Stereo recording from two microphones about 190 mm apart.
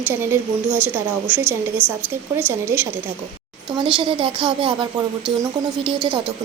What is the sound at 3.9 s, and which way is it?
Speech, 25° right (ahead or behind).